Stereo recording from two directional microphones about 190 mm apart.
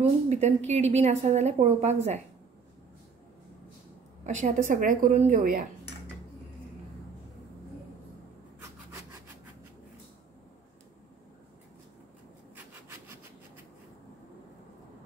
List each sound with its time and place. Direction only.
0.0 s a woman's voice: 35° right (ahead or behind)
4.3 s a woman's voice: 40° right (ahead or behind)